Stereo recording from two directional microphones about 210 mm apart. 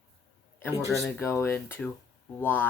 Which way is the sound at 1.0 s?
10° left (ahead or behind).